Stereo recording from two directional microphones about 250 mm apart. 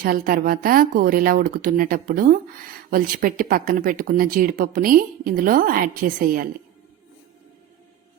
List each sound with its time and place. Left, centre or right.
0.0 s speech: right